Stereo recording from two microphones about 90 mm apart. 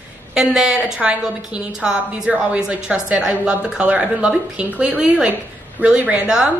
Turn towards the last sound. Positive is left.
turn(degrees=-10)  # may be behind; listen again after turning